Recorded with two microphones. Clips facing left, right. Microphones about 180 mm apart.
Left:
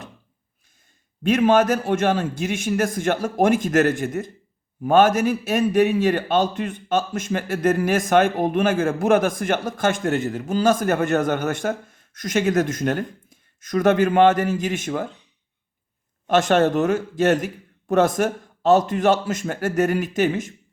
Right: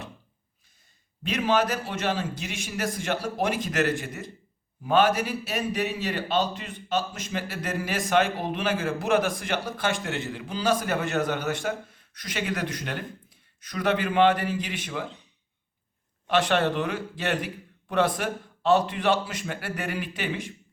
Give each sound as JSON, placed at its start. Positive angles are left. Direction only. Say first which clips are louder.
{"t": 1.2, "sound": "speech", "louder": "left 8 dB", "side_deg": 50}
{"t": 16.2, "sound": "speech", "louder": "left 6 dB", "side_deg": 45}